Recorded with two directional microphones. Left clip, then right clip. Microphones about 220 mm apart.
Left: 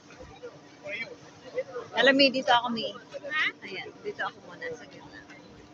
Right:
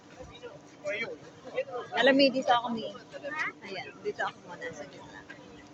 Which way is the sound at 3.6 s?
15° right (ahead or behind).